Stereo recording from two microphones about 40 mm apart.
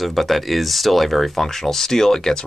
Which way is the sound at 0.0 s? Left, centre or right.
Centre.